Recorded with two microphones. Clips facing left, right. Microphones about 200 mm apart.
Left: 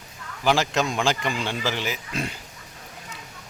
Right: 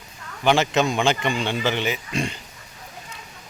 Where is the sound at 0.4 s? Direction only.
Centre (ahead or behind).